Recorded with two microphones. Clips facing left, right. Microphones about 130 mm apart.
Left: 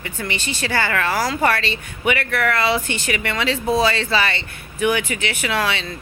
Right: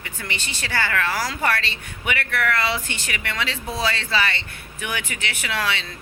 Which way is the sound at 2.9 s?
15° left (ahead or behind).